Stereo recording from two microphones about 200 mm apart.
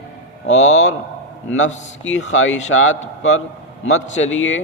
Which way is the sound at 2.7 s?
80° left.